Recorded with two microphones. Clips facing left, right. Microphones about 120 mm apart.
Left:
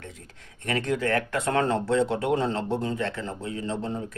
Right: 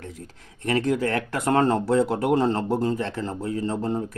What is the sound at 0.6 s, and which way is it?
Speech, 30° right (ahead or behind).